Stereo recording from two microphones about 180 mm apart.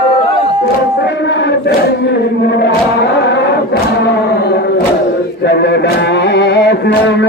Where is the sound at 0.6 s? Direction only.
75° left (ahead or behind).